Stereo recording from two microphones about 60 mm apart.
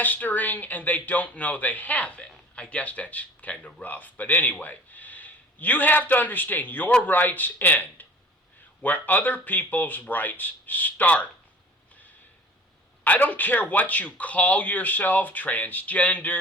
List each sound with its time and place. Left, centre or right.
0.0 s a man's voice: left
13.1 s speech: left